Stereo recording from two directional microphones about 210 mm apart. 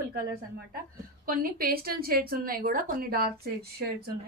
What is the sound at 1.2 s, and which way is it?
Speech, 45° right (ahead or behind).